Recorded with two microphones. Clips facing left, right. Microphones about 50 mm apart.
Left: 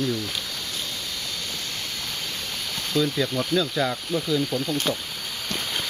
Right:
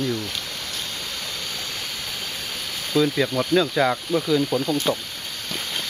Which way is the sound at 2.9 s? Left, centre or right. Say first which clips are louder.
Right 3 dB; centre.